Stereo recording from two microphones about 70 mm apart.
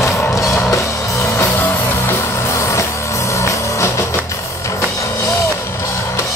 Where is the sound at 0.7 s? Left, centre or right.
Left.